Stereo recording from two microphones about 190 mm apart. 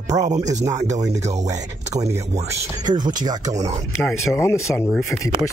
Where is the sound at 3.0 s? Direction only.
20° right (ahead or behind).